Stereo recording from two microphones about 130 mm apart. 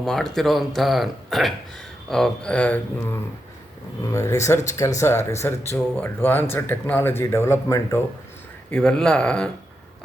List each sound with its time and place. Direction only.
0.0 s speech: 5° left (ahead or behind)
4.0 s speech: 25° left (ahead or behind)
8.7 s speech: 5° left (ahead or behind)